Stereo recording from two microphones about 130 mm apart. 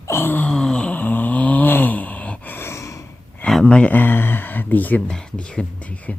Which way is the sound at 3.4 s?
5° left (ahead or behind).